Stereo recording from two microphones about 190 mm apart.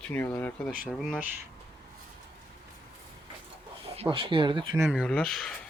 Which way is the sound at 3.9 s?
30° right (ahead or behind).